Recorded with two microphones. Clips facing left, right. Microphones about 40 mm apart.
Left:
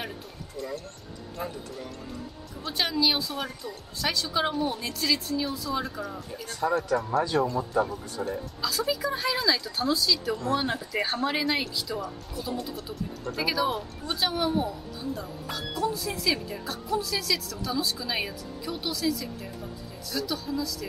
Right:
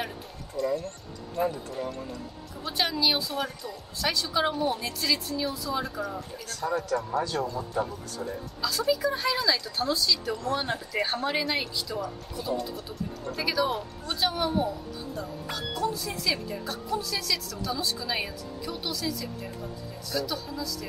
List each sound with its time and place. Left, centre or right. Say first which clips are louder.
1.3 s speech: right 7 dB; centre
2.6 s speech: left 1 dB; centre
6.6 s speech: left 3 dB; centre
8.5 s speech: right 3 dB; centre